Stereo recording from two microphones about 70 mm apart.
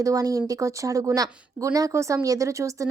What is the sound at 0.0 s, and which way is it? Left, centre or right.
Speech, right.